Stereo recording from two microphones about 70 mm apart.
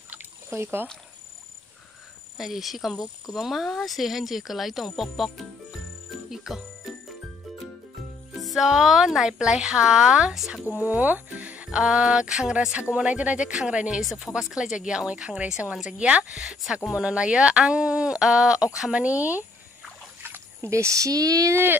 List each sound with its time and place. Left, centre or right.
0.5 s speech: right
2.3 s speech: centre
6.3 s music: centre
8.4 s speech: centre
10.8 s speech: right
11.8 s speech: centre
14.0 s speech: centre
16.3 s speech: centre
18.8 s speech: centre
20.2 s splash: right
20.7 s speech: right